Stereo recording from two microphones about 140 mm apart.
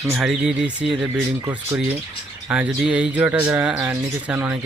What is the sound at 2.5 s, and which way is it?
Speech, 10° right (ahead or behind).